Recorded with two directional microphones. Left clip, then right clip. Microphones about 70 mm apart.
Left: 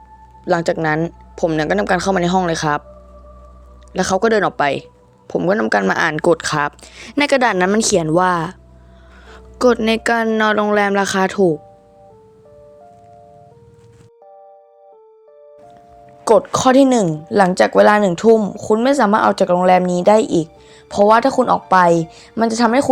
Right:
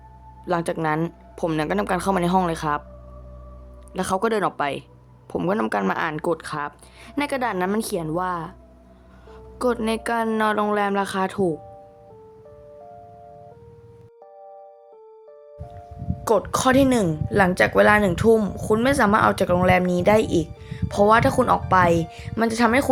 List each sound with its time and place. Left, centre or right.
0.4 s speech: centre
0.8 s speech: centre
1.5 s speech: centre
3.9 s speech: centre
5.3 s speech: centre
5.9 s a woman's voice: left
6.4 s speech: left
9.6 s a woman's voice: left
11.3 s speech: left
16.2 s speech: left
18.1 s speech: centre
20.7 s speech: centre
21.7 s speech: centre